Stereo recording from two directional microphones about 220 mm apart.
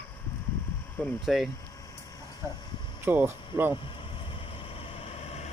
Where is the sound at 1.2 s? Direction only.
Centre (ahead or behind).